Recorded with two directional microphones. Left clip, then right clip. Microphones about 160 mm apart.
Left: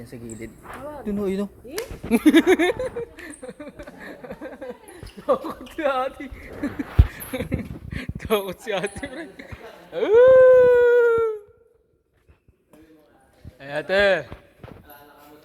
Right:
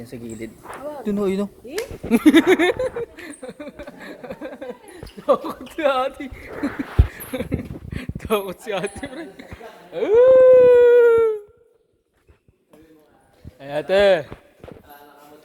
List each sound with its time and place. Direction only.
0.0 s speech: 20° right (ahead or behind)
1.2 s speech: 10° right (ahead or behind)
2.3 s speech: 5° left (ahead or behind)
2.7 s speech: 20° right (ahead or behind)
3.8 s a sound: 15° right (ahead or behind)
5.2 s speech: 10° right (ahead or behind)
6.6 s speech: 10° right (ahead or behind)
7.9 s a sound: centre (ahead or behind)
8.6 s speech: centre (ahead or behind)
10.4 s howl: 20° right (ahead or behind)
10.7 s howl: 30° right (ahead or behind)
13.6 s speech: 45° right (ahead or behind)